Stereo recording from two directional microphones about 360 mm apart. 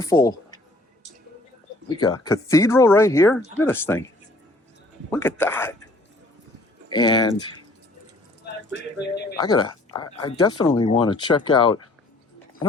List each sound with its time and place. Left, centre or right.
0.0 s speech: centre
2.0 s speech: centre
5.1 s speech: centre
6.9 s speech: centre
8.7 s a sound: left
9.4 s a woman's voice: centre